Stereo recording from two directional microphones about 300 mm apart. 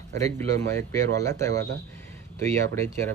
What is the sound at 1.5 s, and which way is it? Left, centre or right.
Speech, right.